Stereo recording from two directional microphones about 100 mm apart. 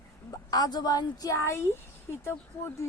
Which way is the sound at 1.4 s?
25° left (ahead or behind).